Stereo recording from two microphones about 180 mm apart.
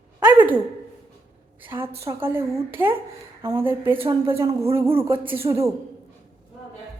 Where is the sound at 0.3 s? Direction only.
10° right (ahead or behind).